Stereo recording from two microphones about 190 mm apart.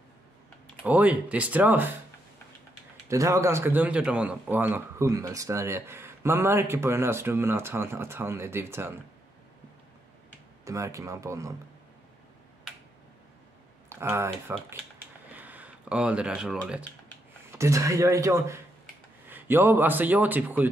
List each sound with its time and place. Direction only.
0.8 s a man's voice: 10° right (ahead or behind)
3.1 s a man's voice: 15° right (ahead or behind)
10.6 s a man's voice: 15° right (ahead or behind)
13.8 s speech: 15° right (ahead or behind)
15.3 s a sound: 10° right (ahead or behind)
17.5 s a man's voice: 15° right (ahead or behind)